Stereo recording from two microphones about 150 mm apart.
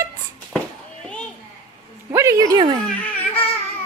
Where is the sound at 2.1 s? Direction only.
20° right (ahead or behind).